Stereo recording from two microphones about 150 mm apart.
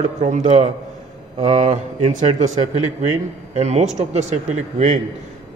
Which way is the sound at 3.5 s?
50° right (ahead or behind).